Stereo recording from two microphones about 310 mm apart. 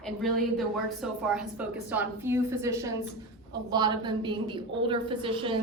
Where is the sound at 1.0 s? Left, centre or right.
Centre.